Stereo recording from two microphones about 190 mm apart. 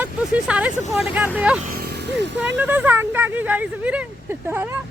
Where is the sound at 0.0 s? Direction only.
5° right (ahead or behind).